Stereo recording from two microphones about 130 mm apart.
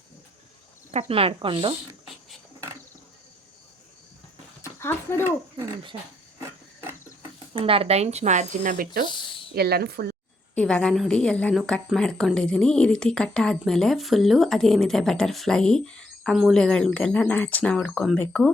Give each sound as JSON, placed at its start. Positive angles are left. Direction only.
{"t": 0.9, "sound": "speech", "side_deg": -55}
{"t": 4.6, "sound": "a sound", "side_deg": 20}
{"t": 7.5, "sound": "speech", "side_deg": -45}
{"t": 9.0, "sound": "speech", "side_deg": 40}
{"t": 10.5, "sound": "a woman's voice", "side_deg": 10}